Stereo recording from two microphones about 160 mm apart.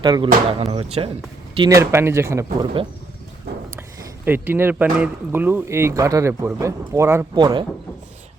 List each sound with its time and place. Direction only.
0.0 s speech: 25° right (ahead or behind)
0.6 s speech: 40° right (ahead or behind)
1.5 s speech: 25° right (ahead or behind)
1.8 s speech: 15° right (ahead or behind)
4.3 s speech: 15° right (ahead or behind)